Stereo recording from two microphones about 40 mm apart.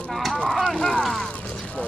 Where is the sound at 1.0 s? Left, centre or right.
Centre.